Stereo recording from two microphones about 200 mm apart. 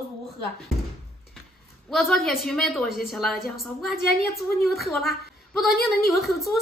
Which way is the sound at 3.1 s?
Centre (ahead or behind).